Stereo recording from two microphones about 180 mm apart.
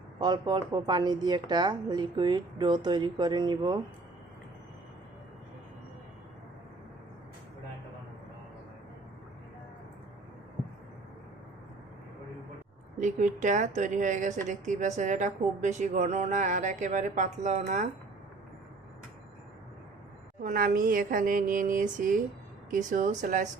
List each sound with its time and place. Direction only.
0.2 s a woman's voice: 25° right (ahead or behind)
13.0 s a woman's voice: 45° right (ahead or behind)
20.4 s a woman's voice: 50° right (ahead or behind)